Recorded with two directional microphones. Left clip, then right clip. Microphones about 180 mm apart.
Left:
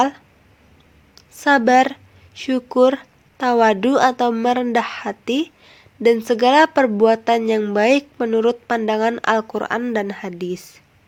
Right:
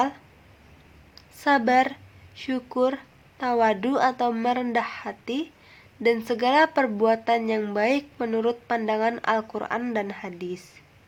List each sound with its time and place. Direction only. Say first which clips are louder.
1.1 s a woman's voice: left 6 dB; 30° left (ahead or behind)